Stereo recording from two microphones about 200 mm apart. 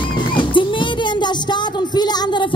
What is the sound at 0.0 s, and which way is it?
Music, 25° left (ahead or behind).